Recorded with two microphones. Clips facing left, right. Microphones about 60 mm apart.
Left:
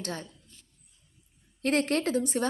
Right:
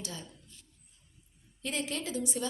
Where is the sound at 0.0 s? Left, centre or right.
Left.